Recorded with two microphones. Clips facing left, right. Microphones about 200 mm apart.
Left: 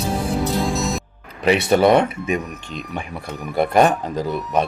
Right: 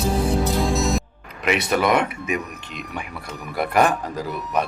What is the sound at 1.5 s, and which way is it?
Speech, 30° left (ahead or behind).